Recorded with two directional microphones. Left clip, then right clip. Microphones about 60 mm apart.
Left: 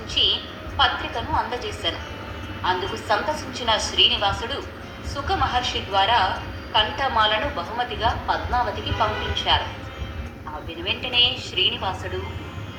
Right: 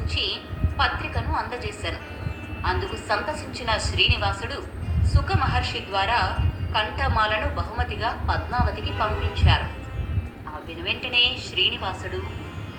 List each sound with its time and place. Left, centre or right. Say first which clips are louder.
0.2 s a sound: left 7 dB; left
1.1 s a woman's voice: left 4 dB; centre
1.5 s a woman's voice: left 4 dB; left
10.8 s a woman's voice: left 1 dB; left